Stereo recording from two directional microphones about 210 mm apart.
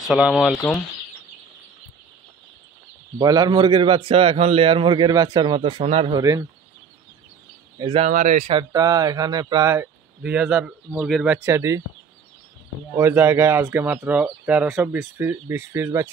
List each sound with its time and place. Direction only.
0.1 s speech: centre (ahead or behind)
3.2 s a man's voice: 15° right (ahead or behind)
7.7 s speech: 25° right (ahead or behind)
8.1 s speech: 35° right (ahead or behind)
8.5 s speech: 20° right (ahead or behind)
12.9 s speech: 10° right (ahead or behind)